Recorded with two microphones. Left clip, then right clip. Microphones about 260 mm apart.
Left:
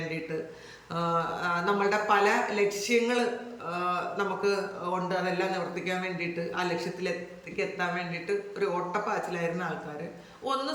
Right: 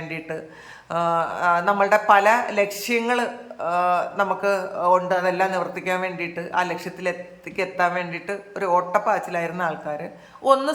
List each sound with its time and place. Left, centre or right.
0.9 s speech: centre